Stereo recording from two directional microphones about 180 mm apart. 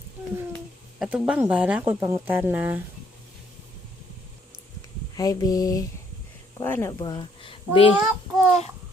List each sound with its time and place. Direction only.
0.5 s a sound: centre (ahead or behind)
1.2 s speech: 10° right (ahead or behind)
5.1 s a sound: 20° left (ahead or behind)
6.6 s speech: 15° left (ahead or behind)
7.0 s speech: 25° left (ahead or behind)
7.9 s a child's voice: 5° right (ahead or behind)